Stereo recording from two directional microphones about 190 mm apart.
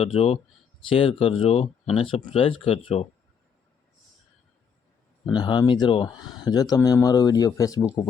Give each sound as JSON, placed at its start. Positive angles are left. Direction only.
{"t": 0.0, "sound": "speech", "side_deg": 30}
{"t": 5.2, "sound": "speech", "side_deg": 25}